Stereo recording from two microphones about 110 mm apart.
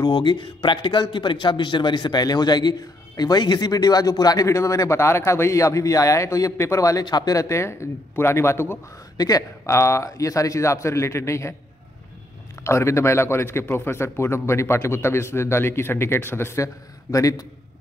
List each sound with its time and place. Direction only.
0.0 s speech: 45° left (ahead or behind); by 8.7 s 25° left (ahead or behind)
9.1 s speech: 35° left (ahead or behind)
12.6 s speech: 25° left (ahead or behind)